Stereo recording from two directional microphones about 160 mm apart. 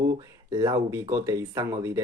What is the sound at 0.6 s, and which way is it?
Speech, 20° right (ahead or behind).